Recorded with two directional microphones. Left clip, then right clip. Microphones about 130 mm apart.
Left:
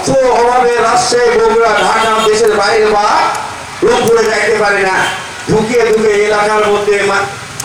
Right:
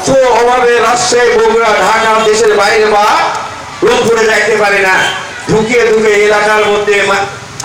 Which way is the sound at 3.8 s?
35° right (ahead or behind).